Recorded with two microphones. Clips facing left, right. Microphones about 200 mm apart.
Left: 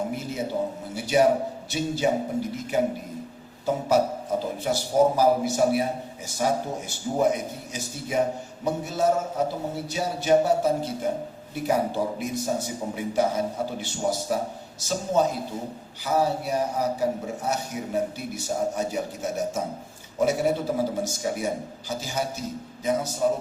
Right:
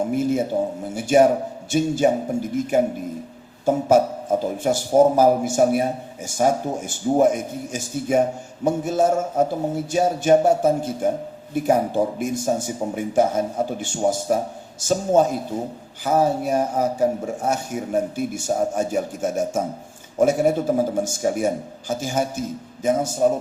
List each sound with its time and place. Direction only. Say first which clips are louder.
0.1 s a man's voice: right 8 dB; 50° right (ahead or behind)